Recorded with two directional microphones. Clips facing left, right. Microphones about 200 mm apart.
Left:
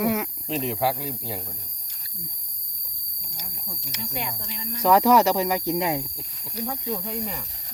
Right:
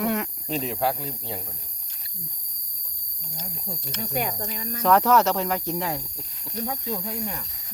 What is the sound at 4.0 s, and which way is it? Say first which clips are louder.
Speech: right 5 dB; 50° right (ahead or behind).